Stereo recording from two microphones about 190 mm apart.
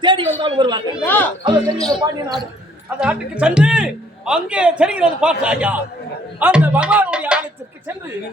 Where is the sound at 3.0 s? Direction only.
5° right (ahead or behind).